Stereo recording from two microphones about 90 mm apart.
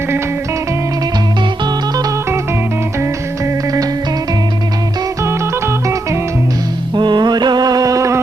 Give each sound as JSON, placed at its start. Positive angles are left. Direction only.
{"t": 5.2, "sound": "music", "side_deg": -35}
{"t": 6.9, "sound": "music", "side_deg": -55}